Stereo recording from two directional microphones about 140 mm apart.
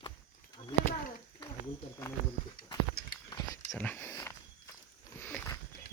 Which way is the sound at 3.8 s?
15° left (ahead or behind).